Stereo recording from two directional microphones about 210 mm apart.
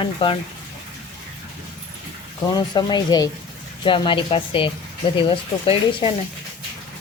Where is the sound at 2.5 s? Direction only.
20° left (ahead or behind).